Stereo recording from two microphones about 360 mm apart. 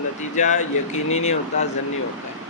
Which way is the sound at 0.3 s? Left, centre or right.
Centre.